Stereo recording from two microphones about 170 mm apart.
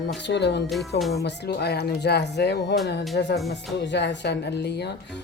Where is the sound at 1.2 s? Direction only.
75° left (ahead or behind).